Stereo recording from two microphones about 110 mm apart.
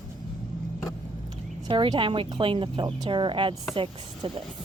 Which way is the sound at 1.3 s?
50° right (ahead or behind).